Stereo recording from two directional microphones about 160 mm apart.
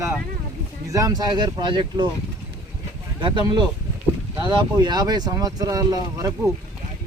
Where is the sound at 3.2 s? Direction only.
30° right (ahead or behind).